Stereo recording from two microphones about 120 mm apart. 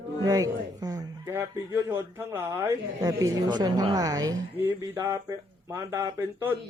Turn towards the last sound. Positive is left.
turn(degrees=-20)  # may be behind; listen again after turning